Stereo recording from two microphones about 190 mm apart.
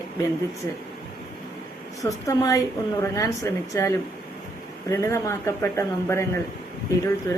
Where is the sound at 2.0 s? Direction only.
15° left (ahead or behind).